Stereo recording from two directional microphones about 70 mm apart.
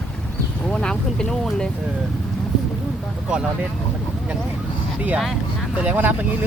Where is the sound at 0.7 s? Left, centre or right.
Centre.